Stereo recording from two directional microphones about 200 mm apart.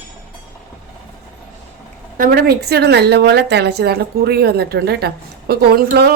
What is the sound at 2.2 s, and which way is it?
A woman's voice, 55° right (ahead or behind).